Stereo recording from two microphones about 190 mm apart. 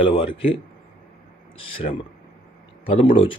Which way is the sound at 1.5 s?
30° left (ahead or behind).